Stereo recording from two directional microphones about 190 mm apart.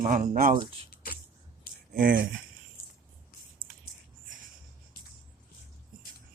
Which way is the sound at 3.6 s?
45° right (ahead or behind).